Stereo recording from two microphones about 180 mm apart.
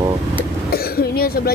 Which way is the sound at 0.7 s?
55° left (ahead or behind).